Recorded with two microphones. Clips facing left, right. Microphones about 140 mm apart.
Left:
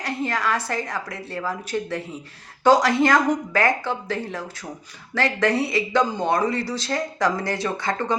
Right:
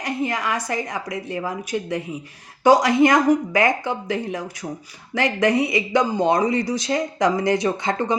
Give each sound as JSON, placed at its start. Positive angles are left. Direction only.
{"t": 0.0, "sound": "speech", "side_deg": -15}